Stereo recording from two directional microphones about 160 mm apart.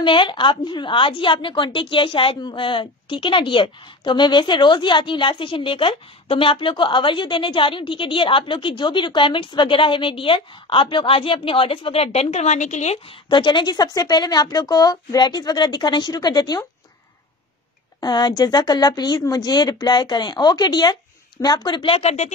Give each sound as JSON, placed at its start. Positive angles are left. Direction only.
{"t": 0.0, "sound": "a woman's voice", "side_deg": 30}
{"t": 18.0, "sound": "a woman's voice", "side_deg": 25}